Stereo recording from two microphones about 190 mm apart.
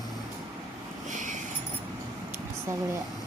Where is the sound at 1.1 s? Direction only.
40° right (ahead or behind).